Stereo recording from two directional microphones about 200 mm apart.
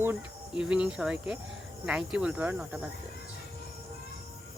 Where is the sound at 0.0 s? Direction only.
5° right (ahead or behind).